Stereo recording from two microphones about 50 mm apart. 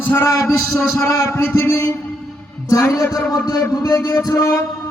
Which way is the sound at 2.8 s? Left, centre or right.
Left.